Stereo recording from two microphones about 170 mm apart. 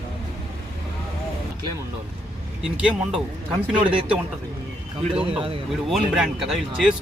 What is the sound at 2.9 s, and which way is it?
Speech, 5° right (ahead or behind).